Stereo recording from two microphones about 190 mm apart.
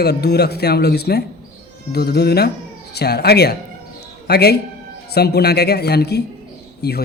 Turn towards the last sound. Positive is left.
turn(degrees=60)  # may be behind; listen again after turning